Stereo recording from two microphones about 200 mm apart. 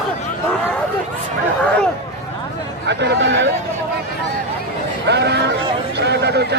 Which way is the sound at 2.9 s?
60° right (ahead or behind).